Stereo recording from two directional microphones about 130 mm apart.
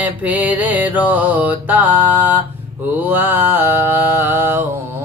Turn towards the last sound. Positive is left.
turn(degrees=-15)  # may be behind; listen again after turning